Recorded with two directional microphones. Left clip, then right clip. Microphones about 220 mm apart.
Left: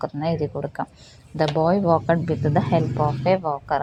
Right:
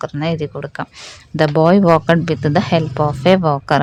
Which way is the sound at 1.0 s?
40° right (ahead or behind).